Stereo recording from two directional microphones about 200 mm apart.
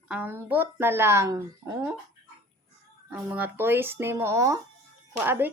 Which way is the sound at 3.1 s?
10° right (ahead or behind).